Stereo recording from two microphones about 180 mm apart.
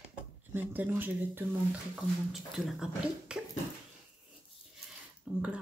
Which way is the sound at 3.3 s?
5° right (ahead or behind).